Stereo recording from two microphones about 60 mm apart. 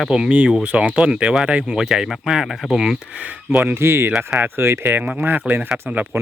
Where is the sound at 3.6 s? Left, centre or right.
Right.